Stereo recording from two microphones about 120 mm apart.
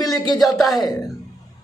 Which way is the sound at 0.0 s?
35° left (ahead or behind).